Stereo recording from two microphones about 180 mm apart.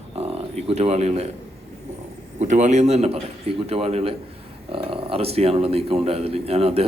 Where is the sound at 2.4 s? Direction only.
40° right (ahead or behind).